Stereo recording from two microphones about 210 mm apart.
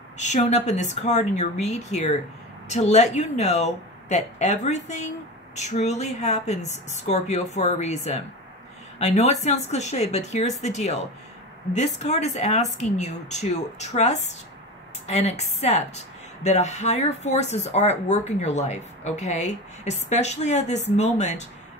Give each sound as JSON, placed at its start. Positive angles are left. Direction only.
{"t": 0.2, "sound": "speech", "side_deg": 35}